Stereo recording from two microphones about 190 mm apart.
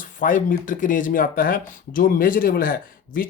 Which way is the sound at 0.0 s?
45° left (ahead or behind).